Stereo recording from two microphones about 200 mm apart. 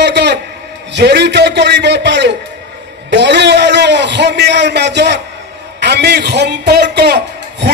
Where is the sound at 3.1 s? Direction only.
60° right (ahead or behind).